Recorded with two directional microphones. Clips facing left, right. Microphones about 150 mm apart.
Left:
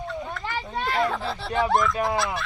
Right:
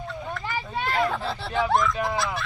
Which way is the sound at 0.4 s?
Centre (ahead or behind).